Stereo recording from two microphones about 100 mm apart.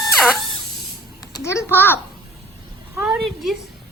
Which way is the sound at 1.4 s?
25° left (ahead or behind).